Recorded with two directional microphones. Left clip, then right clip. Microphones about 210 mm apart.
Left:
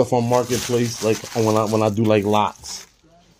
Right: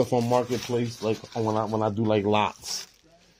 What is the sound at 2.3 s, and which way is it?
Speech, 15° right (ahead or behind).